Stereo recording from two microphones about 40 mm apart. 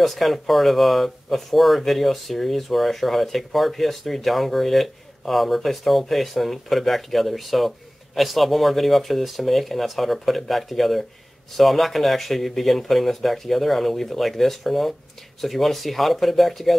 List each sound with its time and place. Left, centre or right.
0.0 s speech: centre